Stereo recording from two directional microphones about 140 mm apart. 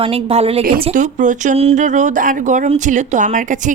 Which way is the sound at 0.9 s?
65° right (ahead or behind).